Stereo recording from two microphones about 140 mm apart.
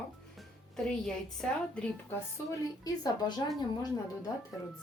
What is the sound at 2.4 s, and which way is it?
A woman's voice, 25° left (ahead or behind).